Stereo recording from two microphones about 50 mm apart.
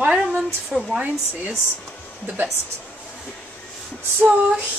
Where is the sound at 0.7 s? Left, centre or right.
Centre.